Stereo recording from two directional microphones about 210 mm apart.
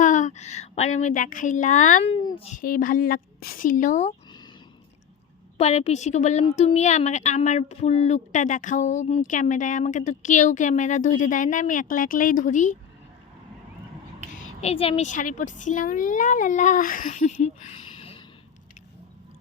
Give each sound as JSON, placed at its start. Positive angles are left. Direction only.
{"t": 0.0, "sound": "a sound", "side_deg": 35}
{"t": 0.9, "sound": "a woman's voice", "side_deg": 35}
{"t": 5.5, "sound": "a woman's voice", "side_deg": 30}
{"t": 14.6, "sound": "a woman's voice", "side_deg": 30}